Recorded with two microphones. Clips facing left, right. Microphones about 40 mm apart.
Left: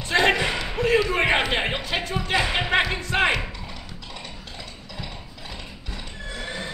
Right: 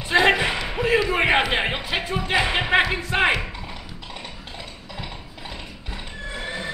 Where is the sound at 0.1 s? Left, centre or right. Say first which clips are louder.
Right 2 dB; centre.